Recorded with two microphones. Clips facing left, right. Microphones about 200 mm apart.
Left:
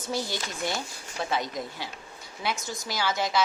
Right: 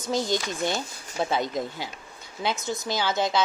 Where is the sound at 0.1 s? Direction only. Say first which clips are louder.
Right 6 dB; 20° right (ahead or behind).